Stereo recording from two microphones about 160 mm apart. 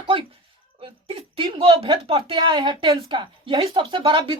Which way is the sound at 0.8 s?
35° right (ahead or behind).